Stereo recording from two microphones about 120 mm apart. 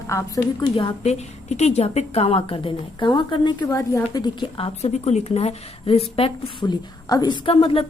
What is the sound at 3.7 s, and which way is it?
A woman's voice, 25° left (ahead or behind).